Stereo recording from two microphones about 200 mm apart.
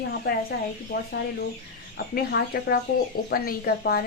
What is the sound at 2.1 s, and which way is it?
Speech, 50° left (ahead or behind).